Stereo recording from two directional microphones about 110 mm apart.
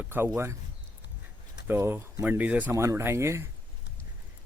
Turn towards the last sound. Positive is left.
turn(degrees=-25)  # may be behind; listen again after turning